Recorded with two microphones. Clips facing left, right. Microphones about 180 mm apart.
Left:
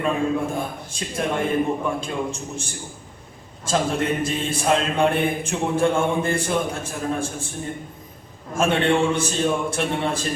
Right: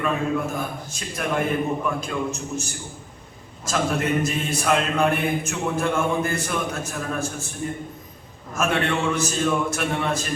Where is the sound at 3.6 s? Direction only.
30° left (ahead or behind).